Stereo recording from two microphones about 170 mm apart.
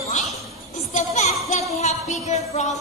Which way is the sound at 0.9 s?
45° left (ahead or behind).